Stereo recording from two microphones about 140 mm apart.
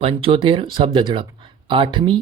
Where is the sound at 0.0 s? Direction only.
40° right (ahead or behind).